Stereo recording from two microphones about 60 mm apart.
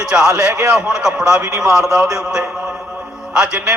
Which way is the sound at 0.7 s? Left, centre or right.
Centre.